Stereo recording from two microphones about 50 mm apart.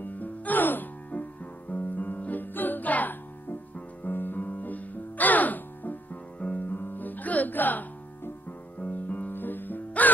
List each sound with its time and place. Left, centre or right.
0.0 s music: left